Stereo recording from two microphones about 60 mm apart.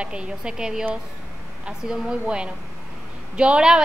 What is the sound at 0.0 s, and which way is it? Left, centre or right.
A woman's voice, centre.